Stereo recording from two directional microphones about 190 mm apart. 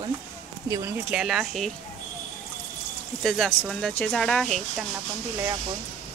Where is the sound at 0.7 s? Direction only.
10° right (ahead or behind).